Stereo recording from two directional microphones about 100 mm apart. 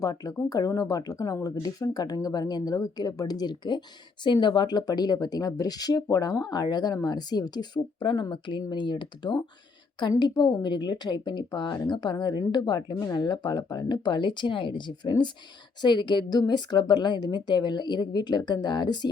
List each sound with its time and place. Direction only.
0.0 s a woman's voice: 40° left (ahead or behind)